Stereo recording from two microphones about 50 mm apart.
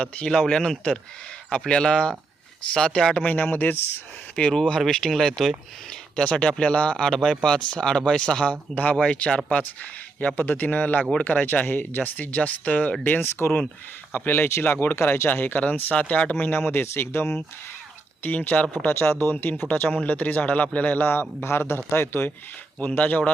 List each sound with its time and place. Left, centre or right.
0.0 s speech: centre
3.2 s speech: left
4.4 s speech: left
6.1 s speech: centre
6.9 s speech: centre
10.2 s speech: left
11.4 s speech: left
12.4 s speech: left
14.9 s speech: left
16.5 s speech: left
18.2 s speech: left
18.8 s speech: left
21.1 s speech: left
22.9 s speech: left